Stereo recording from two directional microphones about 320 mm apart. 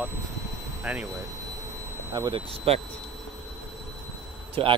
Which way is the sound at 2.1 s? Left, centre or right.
Centre.